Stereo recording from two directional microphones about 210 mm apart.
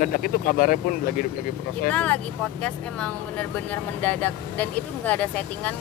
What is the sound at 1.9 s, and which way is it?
Speech, 5° left (ahead or behind).